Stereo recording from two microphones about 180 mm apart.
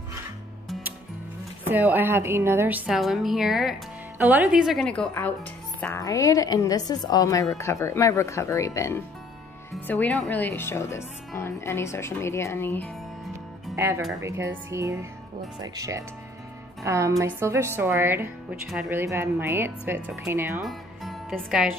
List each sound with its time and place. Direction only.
1.7 s a woman's voice: 10° right (ahead or behind)
5.8 s a woman's voice: 15° left (ahead or behind)
13.7 s a woman's voice: 15° right (ahead or behind)
20.6 s music: centre (ahead or behind)